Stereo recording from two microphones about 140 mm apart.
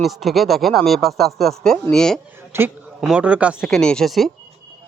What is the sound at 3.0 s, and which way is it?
Speech, 5° right (ahead or behind).